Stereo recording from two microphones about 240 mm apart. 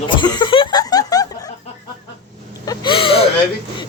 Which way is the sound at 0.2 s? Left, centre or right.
Centre.